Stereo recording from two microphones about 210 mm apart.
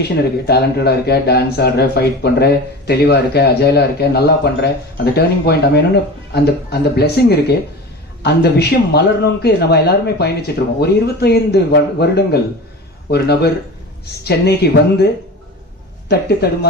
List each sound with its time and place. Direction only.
0.0 s speech: 50° left (ahead or behind)
16.4 s speech: 50° left (ahead or behind)